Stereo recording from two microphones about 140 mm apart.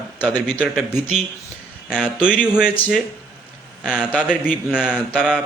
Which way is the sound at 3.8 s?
5° right (ahead or behind).